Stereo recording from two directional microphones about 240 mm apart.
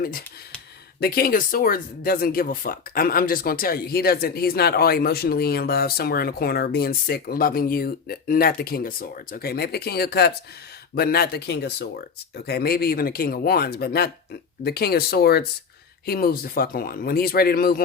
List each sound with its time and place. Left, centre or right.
0.9 s speech: left